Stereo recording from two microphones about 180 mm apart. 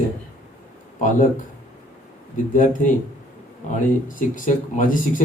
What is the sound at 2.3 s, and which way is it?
Speech, 45° left (ahead or behind).